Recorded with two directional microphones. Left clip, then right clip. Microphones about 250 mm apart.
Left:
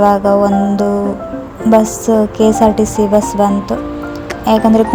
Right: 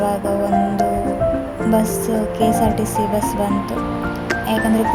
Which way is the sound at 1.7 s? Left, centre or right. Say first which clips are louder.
Left 9 dB; left.